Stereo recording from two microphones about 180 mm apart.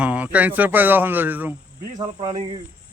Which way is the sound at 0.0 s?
10° right (ahead or behind).